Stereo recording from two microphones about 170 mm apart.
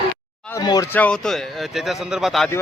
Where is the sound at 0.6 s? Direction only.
25° left (ahead or behind).